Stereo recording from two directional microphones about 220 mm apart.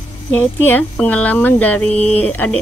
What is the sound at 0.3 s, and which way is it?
Speech, 10° left (ahead or behind).